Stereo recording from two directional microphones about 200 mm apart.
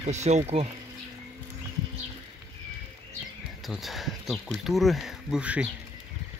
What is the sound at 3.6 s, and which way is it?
Speech, centre (ahead or behind).